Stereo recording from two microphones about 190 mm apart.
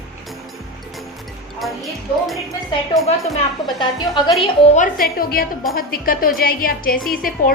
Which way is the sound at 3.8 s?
25° left (ahead or behind).